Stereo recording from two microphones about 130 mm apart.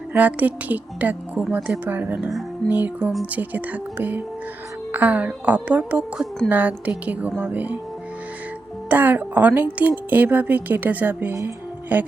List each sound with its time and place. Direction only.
0.1 s speech: 10° right (ahead or behind)
8.9 s speech: 15° right (ahead or behind)